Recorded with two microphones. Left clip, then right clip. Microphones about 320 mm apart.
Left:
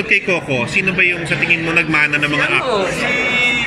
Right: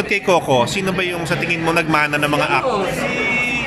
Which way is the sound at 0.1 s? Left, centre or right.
Centre.